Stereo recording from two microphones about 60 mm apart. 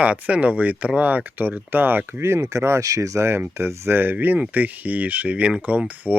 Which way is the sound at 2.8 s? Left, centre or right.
Right.